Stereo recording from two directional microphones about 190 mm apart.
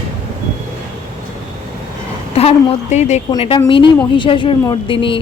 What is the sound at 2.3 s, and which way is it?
A woman's voice, 30° left (ahead or behind).